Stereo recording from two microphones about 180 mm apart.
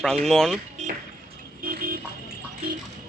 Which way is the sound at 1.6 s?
55° right (ahead or behind).